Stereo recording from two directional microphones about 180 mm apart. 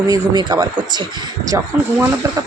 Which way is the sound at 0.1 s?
20° right (ahead or behind).